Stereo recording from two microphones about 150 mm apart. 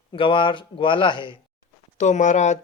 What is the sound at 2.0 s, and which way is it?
Speech, 55° left (ahead or behind).